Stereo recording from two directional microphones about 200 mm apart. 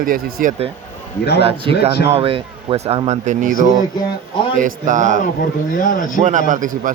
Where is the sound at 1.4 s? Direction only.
30° right (ahead or behind).